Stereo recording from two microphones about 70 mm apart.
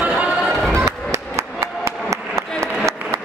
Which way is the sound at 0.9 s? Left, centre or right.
Right.